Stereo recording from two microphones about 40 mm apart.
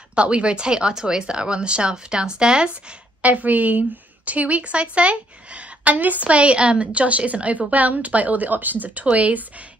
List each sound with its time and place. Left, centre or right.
0.1 s speech: right
3.2 s a woman's voice: right
9.0 s a woman's voice: right